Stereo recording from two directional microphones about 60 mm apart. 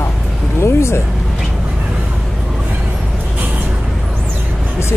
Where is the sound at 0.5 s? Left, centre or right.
Left.